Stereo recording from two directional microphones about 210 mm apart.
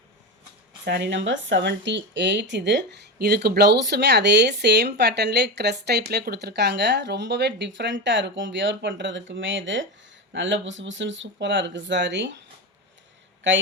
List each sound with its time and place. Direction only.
0.9 s speech: 60° right (ahead or behind)
13.4 s speech: 60° right (ahead or behind)